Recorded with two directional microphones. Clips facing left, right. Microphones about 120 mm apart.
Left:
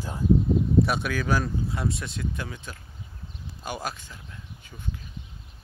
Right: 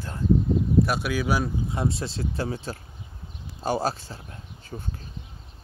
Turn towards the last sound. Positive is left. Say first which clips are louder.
# right 2 dB
turn(degrees=-40)  # may be behind; listen again after turning